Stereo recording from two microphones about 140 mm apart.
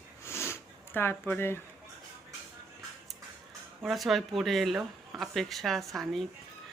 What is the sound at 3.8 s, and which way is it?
Speech, centre (ahead or behind).